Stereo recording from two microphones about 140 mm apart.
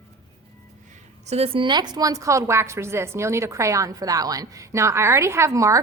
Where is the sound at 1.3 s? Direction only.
45° right (ahead or behind).